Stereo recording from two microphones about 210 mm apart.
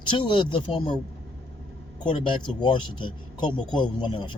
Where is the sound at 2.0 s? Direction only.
20° left (ahead or behind).